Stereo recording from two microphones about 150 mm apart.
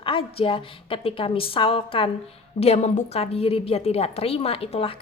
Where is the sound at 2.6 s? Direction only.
45° left (ahead or behind).